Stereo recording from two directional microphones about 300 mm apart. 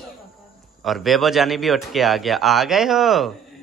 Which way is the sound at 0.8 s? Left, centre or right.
Centre.